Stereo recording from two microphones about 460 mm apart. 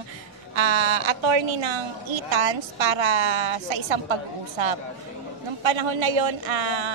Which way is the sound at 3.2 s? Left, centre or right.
Right.